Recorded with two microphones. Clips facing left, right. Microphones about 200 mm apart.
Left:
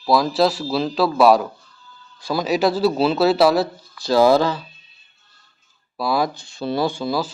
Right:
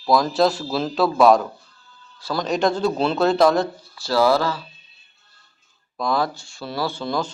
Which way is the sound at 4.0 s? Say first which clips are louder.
Left 4 dB; 20° left (ahead or behind).